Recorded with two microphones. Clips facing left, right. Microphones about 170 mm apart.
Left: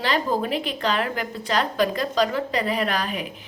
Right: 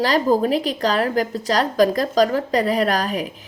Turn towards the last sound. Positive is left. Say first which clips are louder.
# right 5 dB
turn(degrees=-40)  # may be behind; listen again after turning